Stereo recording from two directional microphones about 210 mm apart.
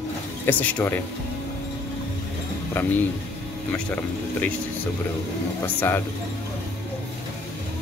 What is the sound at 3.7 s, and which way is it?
Speech, 5° left (ahead or behind).